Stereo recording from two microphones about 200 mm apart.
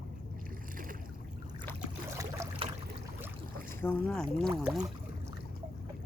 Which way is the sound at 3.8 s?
10° left (ahead or behind).